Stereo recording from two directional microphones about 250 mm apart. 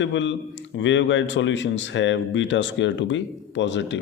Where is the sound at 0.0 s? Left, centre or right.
Left.